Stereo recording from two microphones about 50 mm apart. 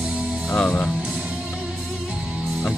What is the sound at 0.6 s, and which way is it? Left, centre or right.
Speech, left.